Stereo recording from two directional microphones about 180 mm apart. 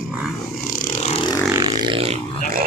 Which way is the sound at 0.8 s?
45° left (ahead or behind).